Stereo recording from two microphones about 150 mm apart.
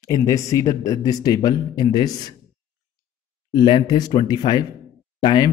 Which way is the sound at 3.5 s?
30° left (ahead or behind).